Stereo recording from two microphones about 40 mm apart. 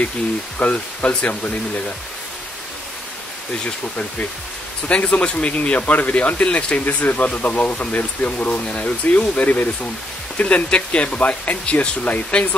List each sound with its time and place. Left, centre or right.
0.6 s speech: left
3.6 s speech: left